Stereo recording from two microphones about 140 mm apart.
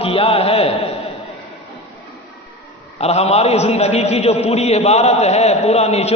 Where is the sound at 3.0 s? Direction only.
50° left (ahead or behind).